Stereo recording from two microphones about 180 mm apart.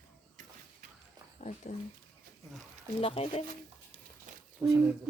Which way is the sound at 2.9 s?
30° left (ahead or behind).